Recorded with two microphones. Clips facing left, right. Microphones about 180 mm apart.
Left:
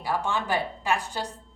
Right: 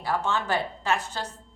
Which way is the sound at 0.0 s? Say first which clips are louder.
Right 1 dB; 15° left (ahead or behind).